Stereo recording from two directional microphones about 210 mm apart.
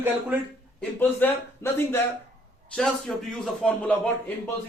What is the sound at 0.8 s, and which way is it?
A man's voice, 10° left (ahead or behind).